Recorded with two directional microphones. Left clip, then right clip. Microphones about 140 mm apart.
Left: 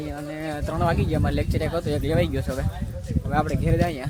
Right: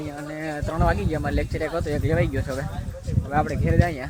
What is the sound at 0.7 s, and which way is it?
Speech, 5° left (ahead or behind).